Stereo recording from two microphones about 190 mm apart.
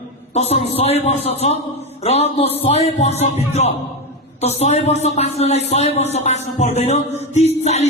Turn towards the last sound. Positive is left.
turn(degrees=35)  # may be behind; listen again after turning